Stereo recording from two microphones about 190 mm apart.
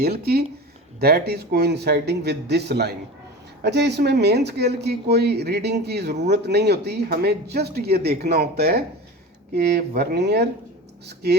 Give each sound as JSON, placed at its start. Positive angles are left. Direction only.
{"t": 0.0, "sound": "speech", "side_deg": -55}